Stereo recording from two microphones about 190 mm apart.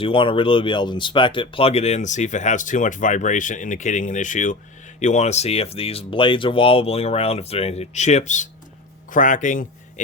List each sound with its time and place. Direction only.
0.0 s speech: 25° left (ahead or behind)